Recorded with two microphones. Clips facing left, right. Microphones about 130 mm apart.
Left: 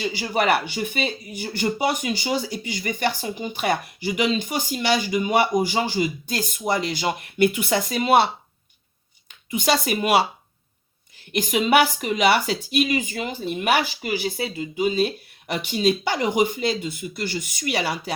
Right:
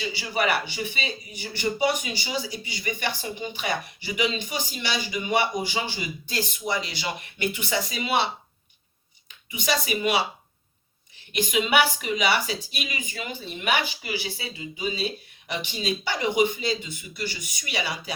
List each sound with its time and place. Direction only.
0.0 s speech: 45° left (ahead or behind)
9.5 s speech: 55° left (ahead or behind)
11.3 s speech: 40° left (ahead or behind)